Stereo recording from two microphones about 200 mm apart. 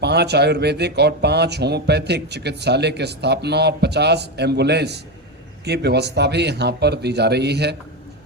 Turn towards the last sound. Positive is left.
turn(degrees=-55)  # may be behind; listen again after turning